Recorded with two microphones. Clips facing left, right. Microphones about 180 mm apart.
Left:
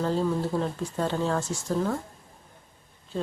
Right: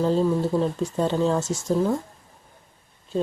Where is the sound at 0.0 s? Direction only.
20° right (ahead or behind).